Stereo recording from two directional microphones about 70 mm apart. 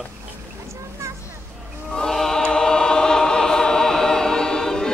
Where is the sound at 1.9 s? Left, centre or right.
Centre.